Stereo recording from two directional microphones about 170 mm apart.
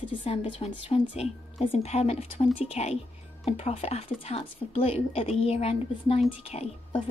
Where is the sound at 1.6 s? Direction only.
35° left (ahead or behind).